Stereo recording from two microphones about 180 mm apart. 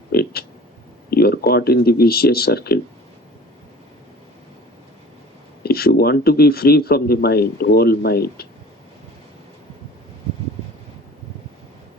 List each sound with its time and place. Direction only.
0.1 s a sound: 60° left (ahead or behind)
1.1 s speech: 60° left (ahead or behind)
5.6 s speech: 60° left (ahead or behind)